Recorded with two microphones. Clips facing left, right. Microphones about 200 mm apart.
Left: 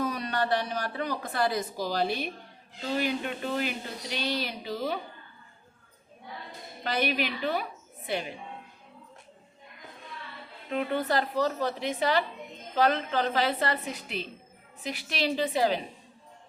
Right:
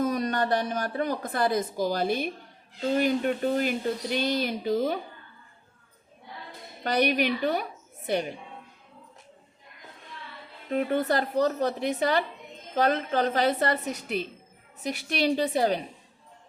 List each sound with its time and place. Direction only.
0.0 s a woman's voice: 45° right (ahead or behind)
6.8 s a woman's voice: 45° right (ahead or behind)
10.7 s a woman's voice: 40° right (ahead or behind)